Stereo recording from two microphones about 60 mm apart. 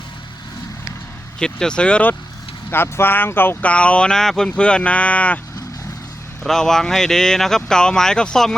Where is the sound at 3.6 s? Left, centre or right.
Left.